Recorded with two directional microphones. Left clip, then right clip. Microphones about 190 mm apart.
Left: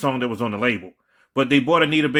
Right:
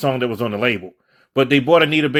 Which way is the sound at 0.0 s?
15° right (ahead or behind).